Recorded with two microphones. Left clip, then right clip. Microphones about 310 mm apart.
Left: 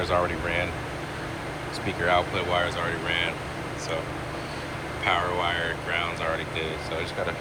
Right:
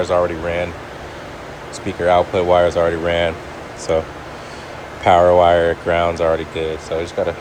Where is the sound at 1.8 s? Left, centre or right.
Centre.